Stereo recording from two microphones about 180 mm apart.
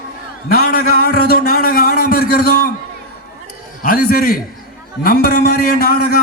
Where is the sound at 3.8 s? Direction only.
50° left (ahead or behind).